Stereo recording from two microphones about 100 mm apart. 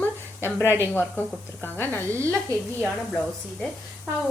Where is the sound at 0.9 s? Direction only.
20° left (ahead or behind).